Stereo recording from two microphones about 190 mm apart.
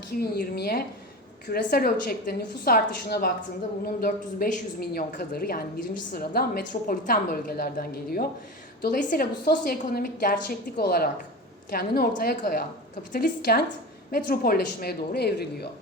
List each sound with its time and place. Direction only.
0.1 s a woman's voice: 55° left (ahead or behind)